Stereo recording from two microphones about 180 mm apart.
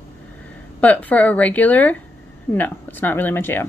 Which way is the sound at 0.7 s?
10° left (ahead or behind).